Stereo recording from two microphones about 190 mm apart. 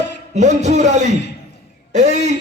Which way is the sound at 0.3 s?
40° right (ahead or behind).